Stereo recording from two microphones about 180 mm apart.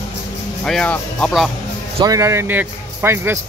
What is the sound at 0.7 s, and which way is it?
Speech, 5° left (ahead or behind).